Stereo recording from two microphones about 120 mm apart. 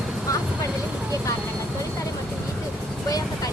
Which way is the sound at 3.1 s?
30° left (ahead or behind).